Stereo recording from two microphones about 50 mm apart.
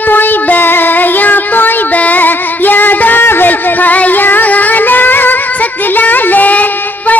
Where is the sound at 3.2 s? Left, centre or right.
Left.